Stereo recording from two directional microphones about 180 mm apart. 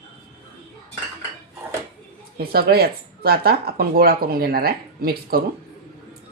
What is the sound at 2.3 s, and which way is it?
Speech, 60° right (ahead or behind).